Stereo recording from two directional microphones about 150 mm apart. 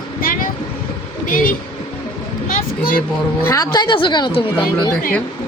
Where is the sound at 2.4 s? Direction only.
65° left (ahead or behind).